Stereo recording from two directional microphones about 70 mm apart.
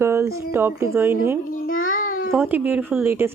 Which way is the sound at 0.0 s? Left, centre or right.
Right.